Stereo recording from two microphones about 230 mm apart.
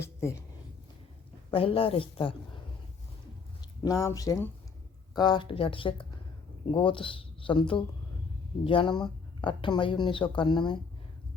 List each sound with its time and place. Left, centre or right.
0.0 s speech: centre
1.5 s speech: left
3.8 s speech: centre
8.6 s speech: left